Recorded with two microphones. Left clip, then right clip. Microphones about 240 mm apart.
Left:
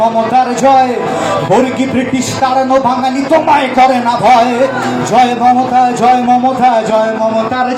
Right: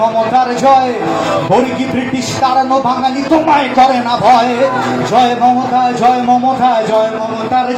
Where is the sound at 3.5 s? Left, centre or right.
Left.